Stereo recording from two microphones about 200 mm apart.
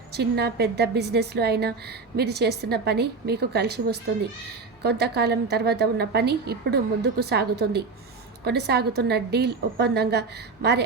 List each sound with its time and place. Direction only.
0.1 s a woman's voice: 55° right (ahead or behind)